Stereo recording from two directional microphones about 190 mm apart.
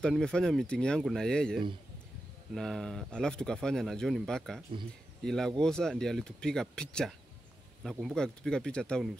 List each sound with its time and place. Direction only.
0.0 s speech: 5° left (ahead or behind)